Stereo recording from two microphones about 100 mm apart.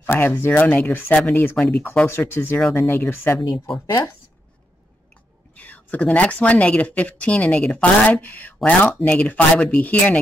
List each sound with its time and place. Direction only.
0.0 s speech: 20° left (ahead or behind)
3.5 s speech: 60° left (ahead or behind)
5.6 s speech: 15° left (ahead or behind)